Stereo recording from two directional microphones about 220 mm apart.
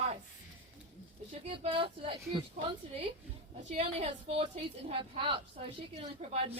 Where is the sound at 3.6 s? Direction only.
30° right (ahead or behind).